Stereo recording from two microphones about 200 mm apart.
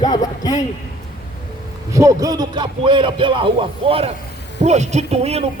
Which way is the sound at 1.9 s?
15° right (ahead or behind).